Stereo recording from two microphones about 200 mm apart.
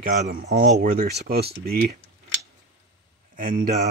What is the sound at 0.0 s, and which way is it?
Speech, 45° right (ahead or behind).